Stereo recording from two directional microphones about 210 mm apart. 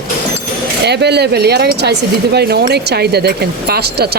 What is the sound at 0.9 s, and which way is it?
Speech, 50° right (ahead or behind).